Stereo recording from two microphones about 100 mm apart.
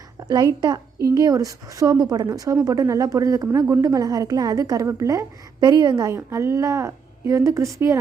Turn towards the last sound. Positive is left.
turn(degrees=-30)  # may be behind; listen again after turning